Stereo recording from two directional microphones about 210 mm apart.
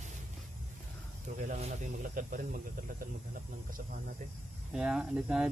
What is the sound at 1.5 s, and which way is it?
Speech, 35° right (ahead or behind).